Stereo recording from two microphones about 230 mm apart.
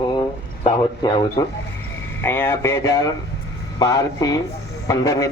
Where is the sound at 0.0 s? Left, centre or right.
Centre.